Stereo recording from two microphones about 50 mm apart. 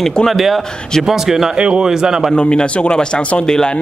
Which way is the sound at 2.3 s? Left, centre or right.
Left.